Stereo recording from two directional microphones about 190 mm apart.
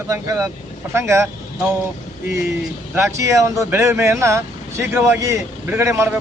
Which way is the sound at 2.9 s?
15° right (ahead or behind).